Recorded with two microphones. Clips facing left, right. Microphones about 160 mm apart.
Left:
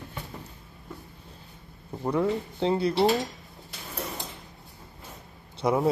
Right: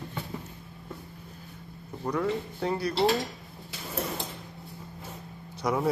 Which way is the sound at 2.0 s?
25° left (ahead or behind).